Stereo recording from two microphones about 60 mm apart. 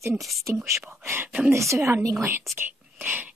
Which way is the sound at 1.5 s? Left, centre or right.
Right.